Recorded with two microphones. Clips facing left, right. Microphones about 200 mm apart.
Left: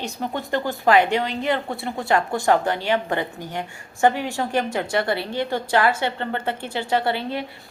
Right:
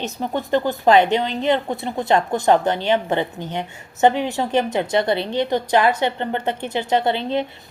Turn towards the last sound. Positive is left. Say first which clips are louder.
# right 4 dB
turn(degrees=-20)  # may be behind; listen again after turning